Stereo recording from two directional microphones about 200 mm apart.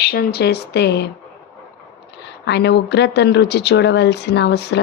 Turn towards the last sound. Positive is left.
turn(degrees=55)  # may be behind; listen again after turning